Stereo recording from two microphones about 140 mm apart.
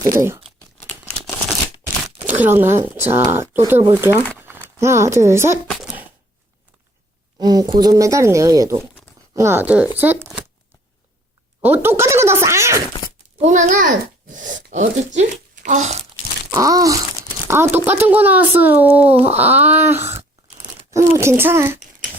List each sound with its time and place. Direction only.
0.0 s speech: 20° right (ahead or behind)
0.9 s crumpling: 10° left (ahead or behind)
2.2 s speech: 15° right (ahead or behind)
4.4 s crumpling: 15° right (ahead or behind)
4.8 s speech: 20° right (ahead or behind)
7.3 s speech: 25° right (ahead or behind)
11.6 s speech: 15° right (ahead or behind)
13.4 s a child's voice: 60° right (ahead or behind)
16.5 s speech: 25° right (ahead or behind)
21.2 s speech: 15° right (ahead or behind)